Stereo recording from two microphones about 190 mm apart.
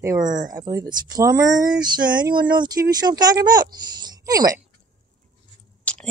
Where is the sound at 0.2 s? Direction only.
40° right (ahead or behind).